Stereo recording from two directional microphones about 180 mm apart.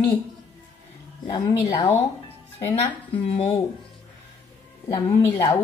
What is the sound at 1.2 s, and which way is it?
Speech, 25° left (ahead or behind).